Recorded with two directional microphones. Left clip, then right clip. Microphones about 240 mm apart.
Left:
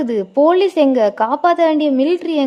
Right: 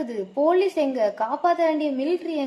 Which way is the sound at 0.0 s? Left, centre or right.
Left.